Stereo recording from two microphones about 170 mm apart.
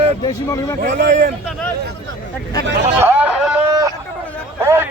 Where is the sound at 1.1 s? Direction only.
55° right (ahead or behind).